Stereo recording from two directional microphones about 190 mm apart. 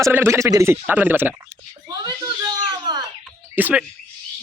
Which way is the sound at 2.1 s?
20° right (ahead or behind).